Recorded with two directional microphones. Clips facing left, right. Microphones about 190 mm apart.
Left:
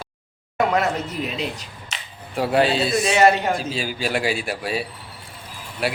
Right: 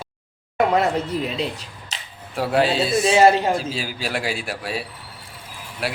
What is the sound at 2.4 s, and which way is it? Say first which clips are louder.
Speech: left 1 dB; centre (ahead or behind).